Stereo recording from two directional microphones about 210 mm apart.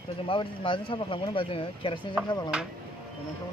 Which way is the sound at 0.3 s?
25° left (ahead or behind).